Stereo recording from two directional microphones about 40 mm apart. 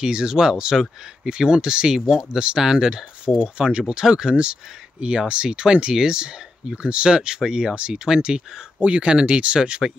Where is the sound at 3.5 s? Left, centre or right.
Right.